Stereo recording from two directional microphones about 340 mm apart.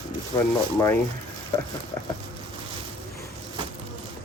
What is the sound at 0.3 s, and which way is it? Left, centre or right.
Speech, centre.